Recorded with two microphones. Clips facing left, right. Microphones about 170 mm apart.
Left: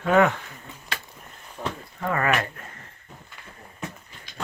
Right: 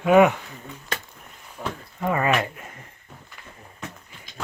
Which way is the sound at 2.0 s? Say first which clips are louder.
Right 2 dB; 15° right (ahead or behind).